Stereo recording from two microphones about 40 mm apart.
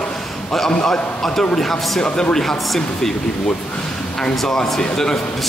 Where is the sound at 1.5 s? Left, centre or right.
Centre.